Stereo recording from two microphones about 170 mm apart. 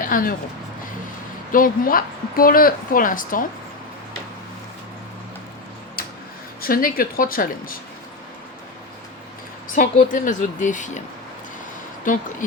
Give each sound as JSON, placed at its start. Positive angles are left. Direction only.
{"t": 0.0, "sound": "speech", "side_deg": 55}
{"t": 1.5, "sound": "speech", "side_deg": 55}
{"t": 6.6, "sound": "speech", "side_deg": 55}
{"t": 9.6, "sound": "a woman's voice", "side_deg": 50}
{"t": 12.0, "sound": "a woman's voice", "side_deg": 50}